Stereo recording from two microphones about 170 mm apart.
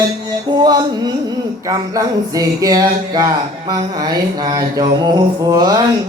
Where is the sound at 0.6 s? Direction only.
25° right (ahead or behind).